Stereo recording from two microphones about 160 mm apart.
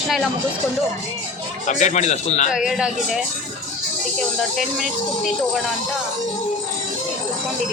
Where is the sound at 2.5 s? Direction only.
5° right (ahead or behind).